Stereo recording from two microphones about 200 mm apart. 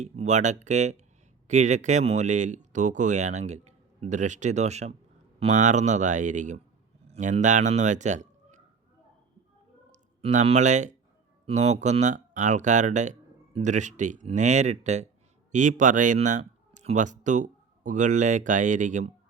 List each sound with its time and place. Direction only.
0.0 s speech: 35° right (ahead or behind)
9.9 s speech: 35° right (ahead or behind)